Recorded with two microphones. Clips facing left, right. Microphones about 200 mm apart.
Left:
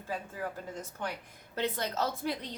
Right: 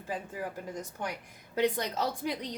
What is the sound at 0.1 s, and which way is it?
A woman's voice, 15° right (ahead or behind).